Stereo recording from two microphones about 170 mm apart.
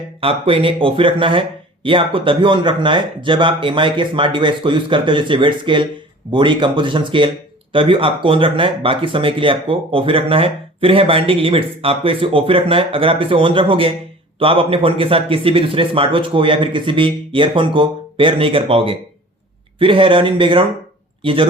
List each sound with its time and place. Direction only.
0.2 s speech: 30° right (ahead or behind)